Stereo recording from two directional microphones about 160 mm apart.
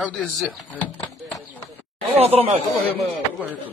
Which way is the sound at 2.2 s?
40° right (ahead or behind).